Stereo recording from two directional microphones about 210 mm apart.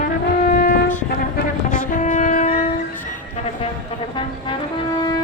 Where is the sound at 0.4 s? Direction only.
40° left (ahead or behind).